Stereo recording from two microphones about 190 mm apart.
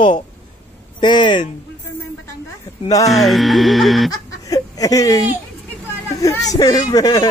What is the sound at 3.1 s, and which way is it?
Music, centre (ahead or behind).